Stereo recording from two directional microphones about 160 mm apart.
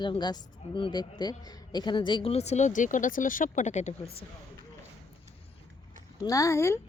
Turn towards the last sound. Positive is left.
turn(degrees=15)  # may be behind; listen again after turning